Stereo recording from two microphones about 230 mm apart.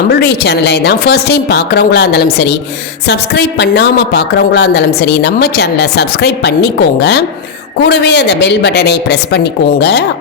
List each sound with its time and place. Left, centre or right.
0.1 s a woman's voice: left